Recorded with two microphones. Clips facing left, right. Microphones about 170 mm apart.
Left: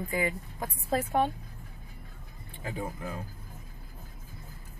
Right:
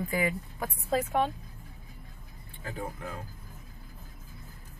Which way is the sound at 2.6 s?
10° left (ahead or behind).